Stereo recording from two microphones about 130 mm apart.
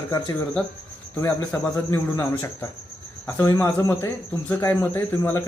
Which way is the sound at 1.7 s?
20° left (ahead or behind).